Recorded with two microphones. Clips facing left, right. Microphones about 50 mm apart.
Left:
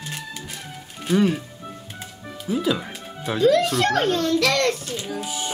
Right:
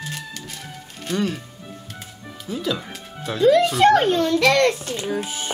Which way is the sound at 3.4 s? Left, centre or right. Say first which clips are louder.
Right 4 dB; centre.